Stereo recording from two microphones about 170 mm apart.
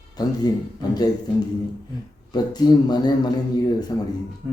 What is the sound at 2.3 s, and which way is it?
Speech, 25° left (ahead or behind).